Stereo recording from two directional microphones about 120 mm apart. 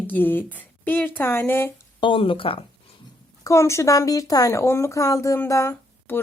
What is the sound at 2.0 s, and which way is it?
Speech, 45° left (ahead or behind).